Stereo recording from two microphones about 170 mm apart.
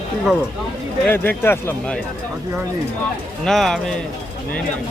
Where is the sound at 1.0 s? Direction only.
10° left (ahead or behind).